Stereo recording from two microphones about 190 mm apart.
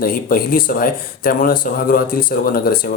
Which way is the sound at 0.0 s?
50° left (ahead or behind).